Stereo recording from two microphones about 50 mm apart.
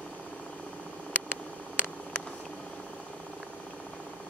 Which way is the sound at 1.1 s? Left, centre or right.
Left.